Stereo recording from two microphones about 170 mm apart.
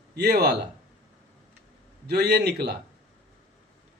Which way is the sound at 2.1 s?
70° right (ahead or behind).